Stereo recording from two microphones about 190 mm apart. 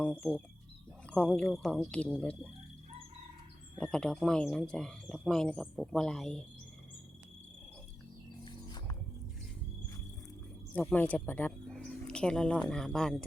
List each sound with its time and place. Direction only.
0.0 s speech: 5° left (ahead or behind)
3.8 s speech: 5° left (ahead or behind)
10.9 s speech: 10° left (ahead or behind)